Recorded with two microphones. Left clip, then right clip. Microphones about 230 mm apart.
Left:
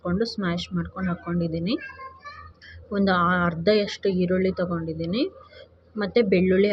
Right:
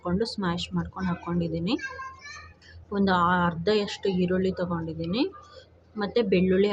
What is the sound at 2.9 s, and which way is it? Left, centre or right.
A woman's voice, centre.